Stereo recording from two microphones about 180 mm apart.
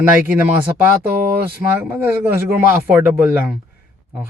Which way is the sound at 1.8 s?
10° right (ahead or behind).